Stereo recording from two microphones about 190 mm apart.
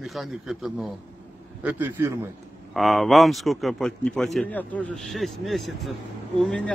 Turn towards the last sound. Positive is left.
turn(degrees=5)  # may be behind; listen again after turning